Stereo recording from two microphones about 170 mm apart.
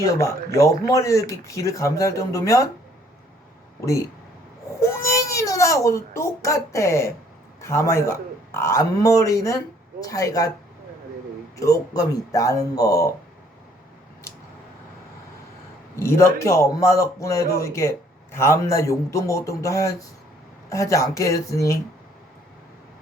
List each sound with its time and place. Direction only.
0.0 s speech: 15° left (ahead or behind)
3.8 s a child's voice: 20° left (ahead or behind)
11.5 s speech: 20° left (ahead or behind)
16.0 s speech: 15° left (ahead or behind)